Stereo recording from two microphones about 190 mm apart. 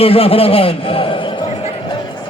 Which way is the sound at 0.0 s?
30° left (ahead or behind).